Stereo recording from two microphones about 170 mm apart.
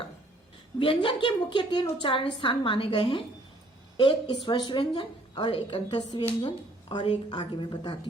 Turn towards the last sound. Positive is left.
turn(degrees=25)  # may be behind; listen again after turning